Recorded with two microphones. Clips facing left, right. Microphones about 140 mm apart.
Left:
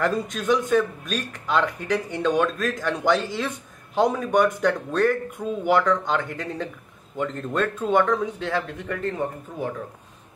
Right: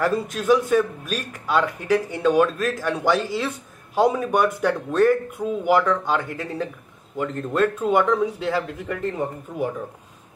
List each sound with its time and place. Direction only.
0.0 s speech: 5° right (ahead or behind)